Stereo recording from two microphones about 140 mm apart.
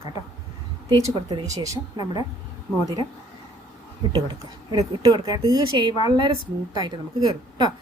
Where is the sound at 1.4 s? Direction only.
25° right (ahead or behind).